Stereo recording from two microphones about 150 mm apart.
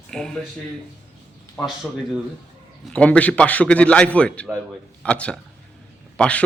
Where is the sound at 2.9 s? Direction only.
10° left (ahead or behind).